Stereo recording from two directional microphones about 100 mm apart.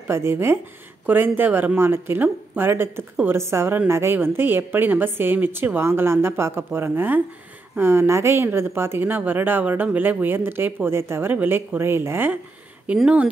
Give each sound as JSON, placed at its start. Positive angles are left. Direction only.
{"t": 0.1, "sound": "speech", "side_deg": -25}
{"t": 12.8, "sound": "speech", "side_deg": -10}